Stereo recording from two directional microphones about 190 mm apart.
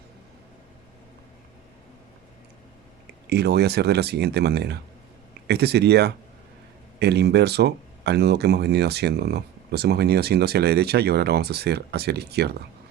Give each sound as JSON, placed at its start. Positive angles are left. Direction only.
{"t": 3.2, "sound": "speech", "side_deg": -60}